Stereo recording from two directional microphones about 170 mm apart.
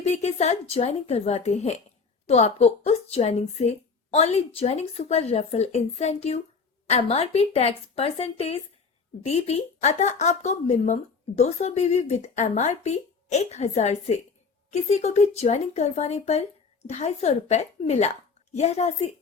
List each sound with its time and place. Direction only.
0.0 s speech: 40° left (ahead or behind)